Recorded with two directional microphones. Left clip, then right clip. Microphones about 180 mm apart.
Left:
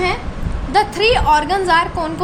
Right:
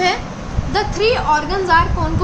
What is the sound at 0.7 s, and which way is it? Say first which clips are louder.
A woman's voice: left 3 dB; 45° left (ahead or behind).